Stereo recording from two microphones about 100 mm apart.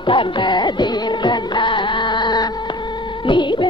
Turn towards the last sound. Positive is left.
turn(degrees=55)  # may be behind; listen again after turning